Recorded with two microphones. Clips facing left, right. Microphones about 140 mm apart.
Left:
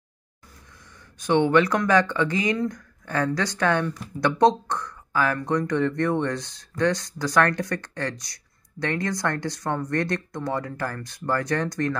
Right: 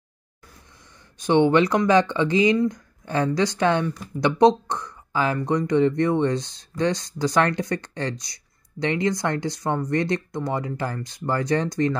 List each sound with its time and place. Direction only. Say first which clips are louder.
1.2 s speech: right 2 dB; 25° right (ahead or behind)